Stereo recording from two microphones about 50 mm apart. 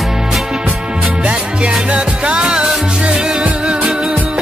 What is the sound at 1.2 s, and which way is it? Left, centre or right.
Music, right.